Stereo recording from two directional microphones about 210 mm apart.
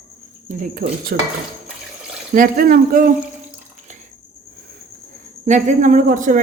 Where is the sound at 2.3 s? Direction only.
40° right (ahead or behind).